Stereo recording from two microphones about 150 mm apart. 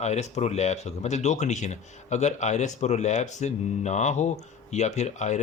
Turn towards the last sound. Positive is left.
turn(degrees=50)  # may be behind; listen again after turning